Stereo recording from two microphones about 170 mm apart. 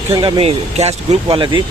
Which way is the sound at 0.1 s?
25° right (ahead or behind).